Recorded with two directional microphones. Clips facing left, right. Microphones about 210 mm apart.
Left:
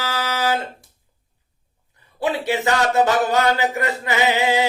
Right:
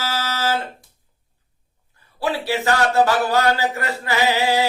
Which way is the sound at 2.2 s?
20° left (ahead or behind).